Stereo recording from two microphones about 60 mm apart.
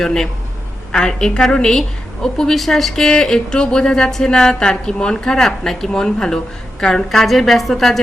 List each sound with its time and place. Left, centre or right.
0.0 s speech: centre